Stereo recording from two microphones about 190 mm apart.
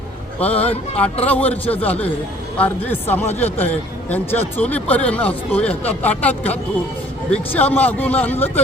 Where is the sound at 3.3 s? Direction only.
35° left (ahead or behind).